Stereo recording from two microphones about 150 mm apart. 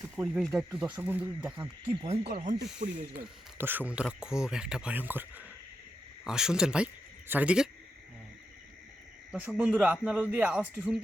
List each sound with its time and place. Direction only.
0.3 s speech: centre (ahead or behind)
1.5 s speech: 35° right (ahead or behind)
2.2 s speech: 70° right (ahead or behind)
2.6 s speech: 5° right (ahead or behind)
9.3 s speech: 10° right (ahead or behind)